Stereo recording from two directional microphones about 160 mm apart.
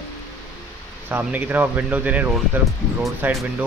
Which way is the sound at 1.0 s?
10° right (ahead or behind).